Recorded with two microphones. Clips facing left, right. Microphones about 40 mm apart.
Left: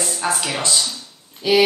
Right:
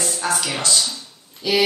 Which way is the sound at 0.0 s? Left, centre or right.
Centre.